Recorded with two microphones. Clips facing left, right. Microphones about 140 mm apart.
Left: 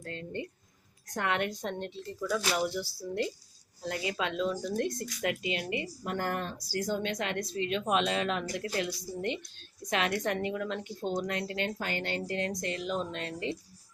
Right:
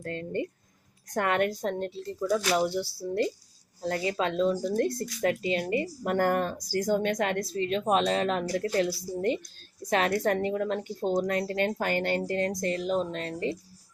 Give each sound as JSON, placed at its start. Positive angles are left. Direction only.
{"t": 0.0, "sound": "a woman's voice", "side_deg": -50}
{"t": 7.5, "sound": "a woman's voice", "side_deg": -35}
{"t": 9.9, "sound": "a woman's voice", "side_deg": -40}